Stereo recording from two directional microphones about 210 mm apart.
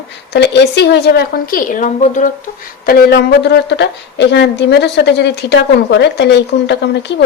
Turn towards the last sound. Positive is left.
turn(degrees=55)  # may be behind; listen again after turning